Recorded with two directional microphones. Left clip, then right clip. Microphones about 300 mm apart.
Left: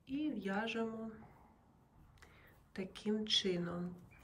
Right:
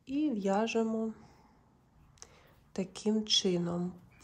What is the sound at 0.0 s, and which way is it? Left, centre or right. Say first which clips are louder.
Speech: right 8 dB; centre.